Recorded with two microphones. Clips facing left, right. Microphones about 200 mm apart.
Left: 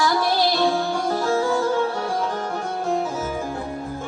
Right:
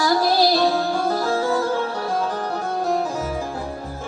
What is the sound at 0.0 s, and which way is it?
Music, 40° right (ahead or behind).